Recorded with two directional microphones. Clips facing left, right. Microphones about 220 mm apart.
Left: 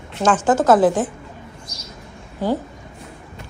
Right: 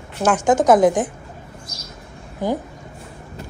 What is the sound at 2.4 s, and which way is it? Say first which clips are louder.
Speech: left 1 dB; 15° right (ahead or behind).